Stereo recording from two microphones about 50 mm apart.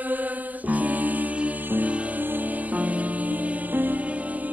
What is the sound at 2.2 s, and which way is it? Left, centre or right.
Music, right.